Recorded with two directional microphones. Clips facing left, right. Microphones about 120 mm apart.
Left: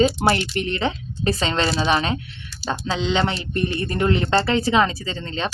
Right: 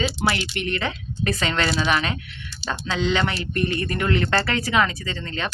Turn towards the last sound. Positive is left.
turn(degrees=25)  # may be behind; listen again after turning